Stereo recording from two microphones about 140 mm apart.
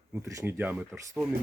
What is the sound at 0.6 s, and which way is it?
Speech, 10° right (ahead or behind).